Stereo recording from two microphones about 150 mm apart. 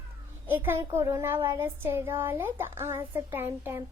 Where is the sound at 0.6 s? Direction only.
15° right (ahead or behind).